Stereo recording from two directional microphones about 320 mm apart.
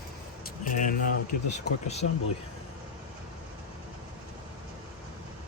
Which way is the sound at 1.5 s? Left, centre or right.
Left.